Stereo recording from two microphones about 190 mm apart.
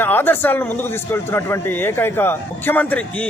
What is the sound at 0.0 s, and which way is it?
A man's voice, 10° left (ahead or behind).